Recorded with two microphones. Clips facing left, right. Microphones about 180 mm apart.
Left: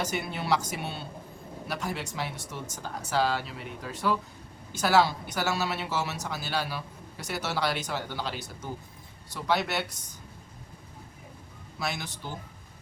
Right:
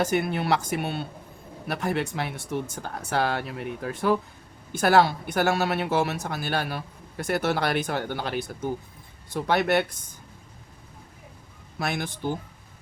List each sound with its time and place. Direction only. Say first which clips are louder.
0.0 s speech: right 7 dB; 55° right (ahead or behind)
11.8 s speech: right 6 dB; 55° right (ahead or behind)